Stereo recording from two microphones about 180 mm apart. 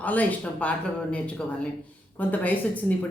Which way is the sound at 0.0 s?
10° left (ahead or behind).